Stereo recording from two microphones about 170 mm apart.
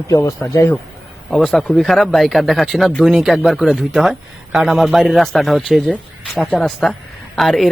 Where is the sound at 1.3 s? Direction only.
Centre (ahead or behind).